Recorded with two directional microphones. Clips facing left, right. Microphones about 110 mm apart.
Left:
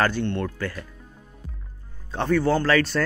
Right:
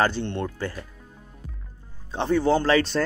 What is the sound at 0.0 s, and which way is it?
Speech, 25° right (ahead or behind).